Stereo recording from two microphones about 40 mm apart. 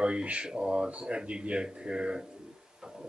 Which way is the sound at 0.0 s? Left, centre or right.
Right.